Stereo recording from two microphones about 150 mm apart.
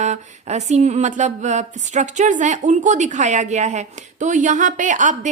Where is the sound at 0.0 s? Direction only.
50° right (ahead or behind).